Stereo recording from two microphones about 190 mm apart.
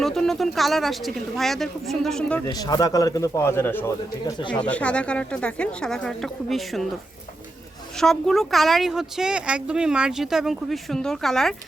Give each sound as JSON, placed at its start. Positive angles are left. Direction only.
{"t": 0.0, "sound": "speech", "side_deg": 0}
{"t": 2.5, "sound": "speech", "side_deg": 20}
{"t": 4.3, "sound": "speech", "side_deg": 25}
{"t": 4.5, "sound": "speech", "side_deg": 5}
{"t": 7.9, "sound": "speech", "side_deg": 0}